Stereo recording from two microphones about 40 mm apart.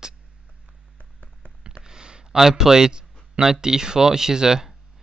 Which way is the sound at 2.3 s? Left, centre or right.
Centre.